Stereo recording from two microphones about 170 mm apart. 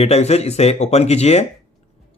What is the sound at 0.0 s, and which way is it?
Speech, 40° left (ahead or behind).